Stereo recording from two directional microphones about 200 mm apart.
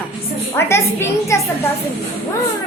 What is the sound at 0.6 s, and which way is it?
A child's voice, 15° left (ahead or behind).